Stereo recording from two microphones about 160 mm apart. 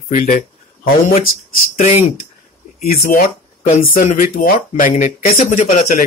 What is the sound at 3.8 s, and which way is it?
Speech, 60° left (ahead or behind).